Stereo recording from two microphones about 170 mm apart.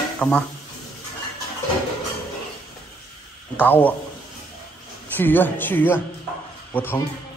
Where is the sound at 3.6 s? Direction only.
10° left (ahead or behind).